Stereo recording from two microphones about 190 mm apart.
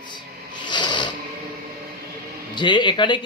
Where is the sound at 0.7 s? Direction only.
25° left (ahead or behind).